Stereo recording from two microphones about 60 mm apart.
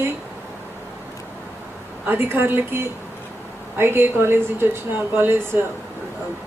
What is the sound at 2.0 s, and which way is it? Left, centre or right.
A woman's voice, right.